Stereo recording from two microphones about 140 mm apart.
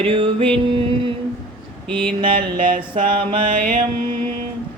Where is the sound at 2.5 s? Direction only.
80° right.